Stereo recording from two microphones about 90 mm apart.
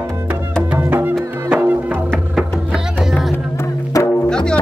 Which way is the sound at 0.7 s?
20° right (ahead or behind).